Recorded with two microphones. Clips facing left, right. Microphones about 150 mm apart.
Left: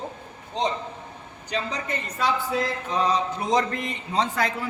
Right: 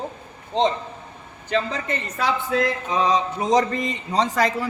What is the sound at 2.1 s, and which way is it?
A man's voice, 80° right.